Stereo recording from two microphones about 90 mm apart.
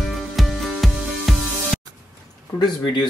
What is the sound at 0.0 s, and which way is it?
Music, centre (ahead or behind).